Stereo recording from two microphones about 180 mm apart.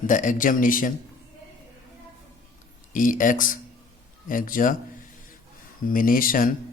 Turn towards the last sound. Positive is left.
turn(degrees=50)  # may be behind; listen again after turning